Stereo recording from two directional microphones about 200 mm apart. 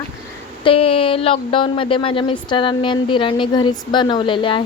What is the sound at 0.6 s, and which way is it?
Speech, 30° left (ahead or behind).